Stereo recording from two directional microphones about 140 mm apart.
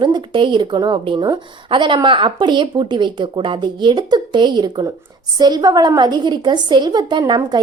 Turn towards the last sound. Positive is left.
turn(degrees=-30)  # may be behind; listen again after turning